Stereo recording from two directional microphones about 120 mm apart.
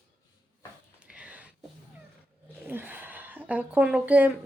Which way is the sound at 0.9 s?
10° right (ahead or behind).